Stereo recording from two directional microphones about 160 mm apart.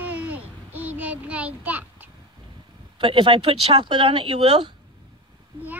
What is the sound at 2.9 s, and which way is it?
Speech, 30° right (ahead or behind).